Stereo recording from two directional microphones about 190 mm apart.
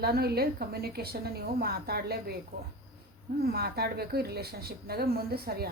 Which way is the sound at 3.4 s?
55° right (ahead or behind).